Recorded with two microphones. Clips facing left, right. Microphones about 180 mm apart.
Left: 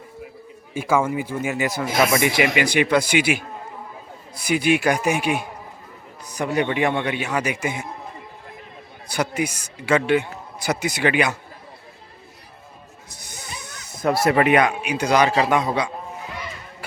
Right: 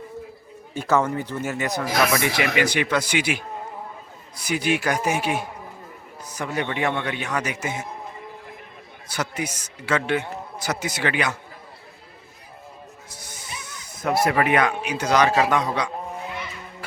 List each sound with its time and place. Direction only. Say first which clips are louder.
0.7 s a man's voice: left 1 dB; 10° left (ahead or behind)
1.8 s speech: left 2 dB; 25° left (ahead or behind)
2.2 s a man's voice: left 2 dB; 15° left (ahead or behind)
9.0 s a man's voice: left 5 dB; 15° left (ahead or behind)
14.3 s a man's voice: left 5 dB; 20° left (ahead or behind)